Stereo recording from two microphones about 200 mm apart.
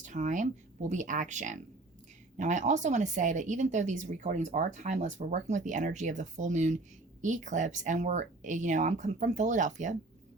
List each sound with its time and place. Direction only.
0.0 s speech: 40° right (ahead or behind)